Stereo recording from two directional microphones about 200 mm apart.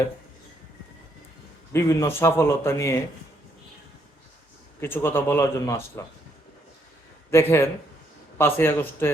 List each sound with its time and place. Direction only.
1.7 s speech: 15° left (ahead or behind)
4.8 s speech: 10° left (ahead or behind)
7.3 s speech: 10° left (ahead or behind)